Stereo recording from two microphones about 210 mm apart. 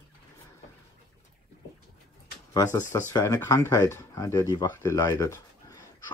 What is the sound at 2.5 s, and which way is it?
Speech, 15° left (ahead or behind).